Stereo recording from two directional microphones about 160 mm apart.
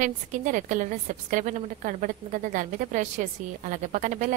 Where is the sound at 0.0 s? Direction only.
55° right (ahead or behind).